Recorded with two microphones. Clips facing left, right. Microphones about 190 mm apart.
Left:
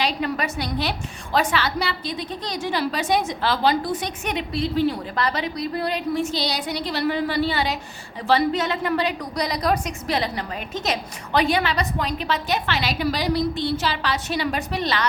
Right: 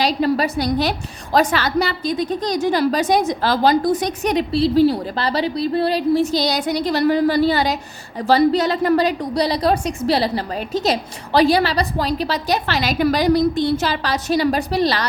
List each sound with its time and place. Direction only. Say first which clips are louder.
0.0 s a woman's voice: right 6 dB; 35° right (ahead or behind)